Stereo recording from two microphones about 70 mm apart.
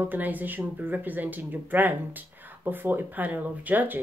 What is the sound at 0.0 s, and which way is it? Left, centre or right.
A woman's voice, right.